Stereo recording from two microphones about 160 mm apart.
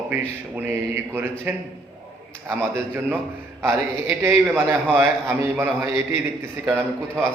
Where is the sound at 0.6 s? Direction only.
15° right (ahead or behind).